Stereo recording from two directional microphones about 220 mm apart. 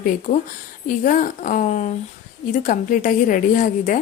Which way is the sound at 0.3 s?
30° left (ahead or behind).